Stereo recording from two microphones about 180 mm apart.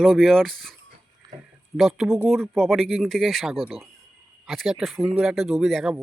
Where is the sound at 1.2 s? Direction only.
20° right (ahead or behind).